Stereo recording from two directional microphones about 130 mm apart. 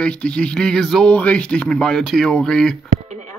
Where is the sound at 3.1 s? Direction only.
65° right (ahead or behind).